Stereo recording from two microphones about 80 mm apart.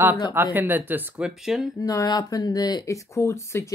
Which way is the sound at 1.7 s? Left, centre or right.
Left.